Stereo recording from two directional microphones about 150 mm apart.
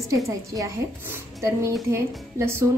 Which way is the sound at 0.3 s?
20° right (ahead or behind).